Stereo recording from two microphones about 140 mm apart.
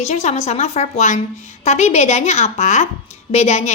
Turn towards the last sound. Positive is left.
turn(degrees=50)  # may be behind; listen again after turning